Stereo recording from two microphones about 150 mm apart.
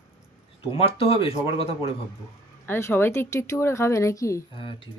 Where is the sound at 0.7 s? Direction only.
40° left (ahead or behind).